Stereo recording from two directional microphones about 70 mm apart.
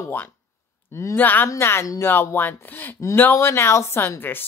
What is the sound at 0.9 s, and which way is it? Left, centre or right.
Speech, left.